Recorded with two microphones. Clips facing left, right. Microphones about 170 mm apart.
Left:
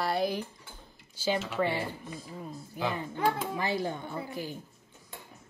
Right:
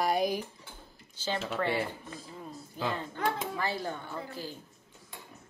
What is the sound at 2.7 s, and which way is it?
Speech, 15° left (ahead or behind).